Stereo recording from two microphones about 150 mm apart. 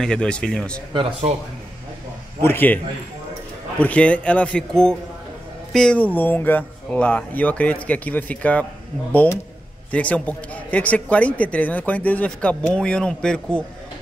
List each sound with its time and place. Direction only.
0.0 s speech: 5° left (ahead or behind)
2.4 s a man's voice: 15° left (ahead or behind)
3.8 s a man's voice: 10° left (ahead or behind)